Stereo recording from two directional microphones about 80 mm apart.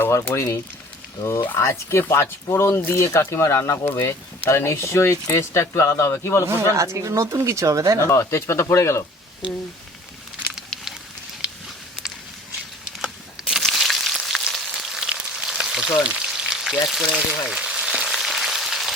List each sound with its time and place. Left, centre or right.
0.0 s speech: left
6.4 s speech: right
8.0 s speech: left
10.7 s fire: centre
13.5 s a sound: centre
15.3 s frying: centre